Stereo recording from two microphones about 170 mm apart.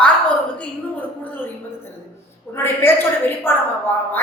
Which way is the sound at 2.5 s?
15° left (ahead or behind).